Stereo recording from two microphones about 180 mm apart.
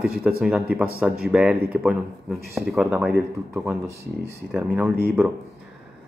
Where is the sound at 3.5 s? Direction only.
15° right (ahead or behind).